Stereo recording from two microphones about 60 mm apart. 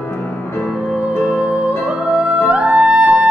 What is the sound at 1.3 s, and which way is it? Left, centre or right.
Music, centre.